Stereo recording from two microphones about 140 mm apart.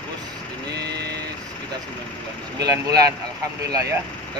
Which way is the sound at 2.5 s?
25° right (ahead or behind).